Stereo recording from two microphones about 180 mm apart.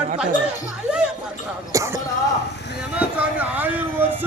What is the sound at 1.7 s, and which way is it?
Speech, 15° right (ahead or behind).